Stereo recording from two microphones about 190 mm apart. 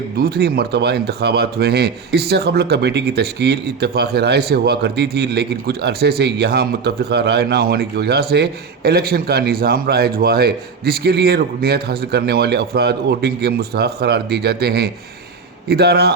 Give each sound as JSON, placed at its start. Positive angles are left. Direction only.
{"t": 0.2, "sound": "speech", "side_deg": -55}